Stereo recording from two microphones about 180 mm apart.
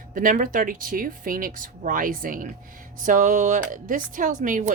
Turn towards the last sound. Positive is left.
turn(degrees=-45)  # may be behind; listen again after turning